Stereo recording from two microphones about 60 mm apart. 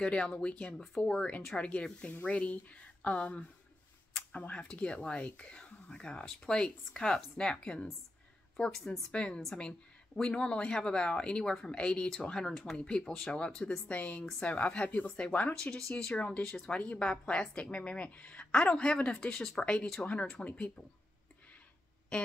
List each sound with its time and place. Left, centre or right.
0.0 s a woman's voice: centre
9.1 s a woman's voice: centre
16.7 s a woman's voice: left
22.1 s speech: centre